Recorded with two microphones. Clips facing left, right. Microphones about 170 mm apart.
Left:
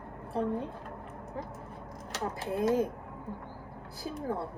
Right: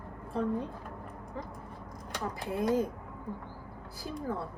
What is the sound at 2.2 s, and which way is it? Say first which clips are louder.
Speech: left 2 dB; 55° left (ahead or behind).